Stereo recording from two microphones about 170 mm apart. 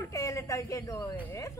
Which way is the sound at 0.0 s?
20° left (ahead or behind).